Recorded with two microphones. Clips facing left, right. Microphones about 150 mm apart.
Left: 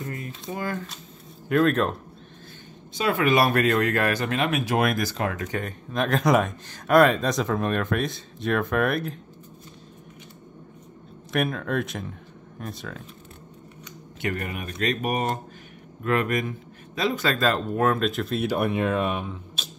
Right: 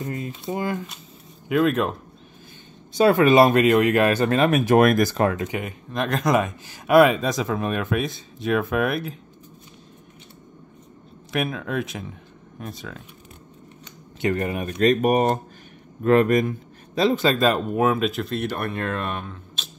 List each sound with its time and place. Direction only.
0.0 s a sound: 20° right (ahead or behind)
1.5 s speech: 5° right (ahead or behind)
3.0 s speech: 40° right (ahead or behind)
3.3 s speech: 20° right (ahead or behind); by 5.3 s 45° right (ahead or behind)
5.5 s speech: 10° right (ahead or behind)
11.3 s speech: centre (ahead or behind)
14.2 s speech: 30° right (ahead or behind)
14.8 s speech: 45° right (ahead or behind); by 19.7 s 5° left (ahead or behind)